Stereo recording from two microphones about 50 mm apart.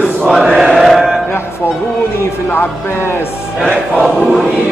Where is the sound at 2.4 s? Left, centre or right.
Left.